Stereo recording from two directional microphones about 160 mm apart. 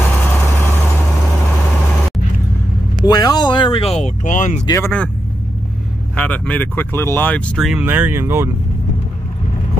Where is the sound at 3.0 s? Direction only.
25° left (ahead or behind); by 4.6 s 50° left (ahead or behind).